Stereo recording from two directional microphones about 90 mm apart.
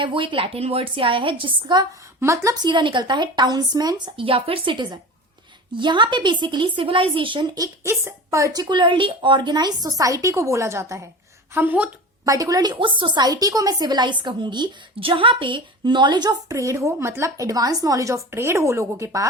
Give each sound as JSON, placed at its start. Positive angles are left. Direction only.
{"t": 0.0, "sound": "a woman's voice", "side_deg": -70}
{"t": 2.2, "sound": "a woman's voice", "side_deg": -35}
{"t": 2.6, "sound": "a woman's voice", "side_deg": -60}
{"t": 7.9, "sound": "a woman's voice", "side_deg": -30}
{"t": 8.6, "sound": "a woman's voice", "side_deg": -60}
{"t": 11.5, "sound": "a woman's voice", "side_deg": -20}
{"t": 12.2, "sound": "a woman's voice", "side_deg": -40}
{"t": 12.8, "sound": "a woman's voice", "side_deg": -65}
{"t": 16.5, "sound": "a woman's voice", "side_deg": -35}